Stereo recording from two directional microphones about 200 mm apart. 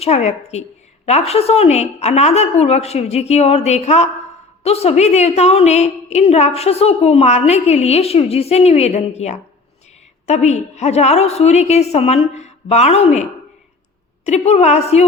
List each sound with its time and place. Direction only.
0.0 s a woman's voice: 35° left (ahead or behind)
14.3 s a woman's voice: 30° left (ahead or behind)